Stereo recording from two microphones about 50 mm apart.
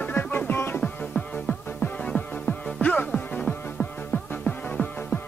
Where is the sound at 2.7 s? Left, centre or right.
Left.